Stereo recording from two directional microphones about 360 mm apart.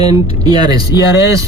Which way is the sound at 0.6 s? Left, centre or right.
Centre.